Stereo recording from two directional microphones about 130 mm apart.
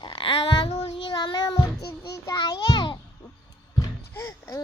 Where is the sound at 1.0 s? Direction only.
35° left (ahead or behind).